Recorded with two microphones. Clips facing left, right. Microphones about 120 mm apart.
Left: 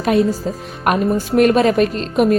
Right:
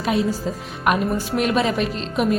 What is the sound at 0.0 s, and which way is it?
A woman's voice, 45° left (ahead or behind).